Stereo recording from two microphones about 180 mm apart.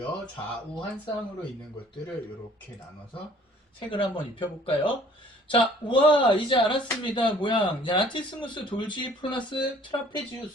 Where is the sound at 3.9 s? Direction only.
30° left (ahead or behind).